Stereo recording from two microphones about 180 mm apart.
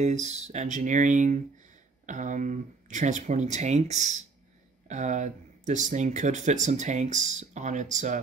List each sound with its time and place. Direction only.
0.0 s speech: 40° right (ahead or behind)